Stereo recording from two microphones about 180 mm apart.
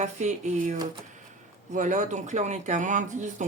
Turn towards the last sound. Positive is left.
turn(degrees=-45)  # may be behind; listen again after turning